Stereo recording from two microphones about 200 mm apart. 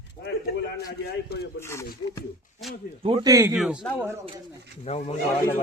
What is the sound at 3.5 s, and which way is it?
Speech, 5° right (ahead or behind).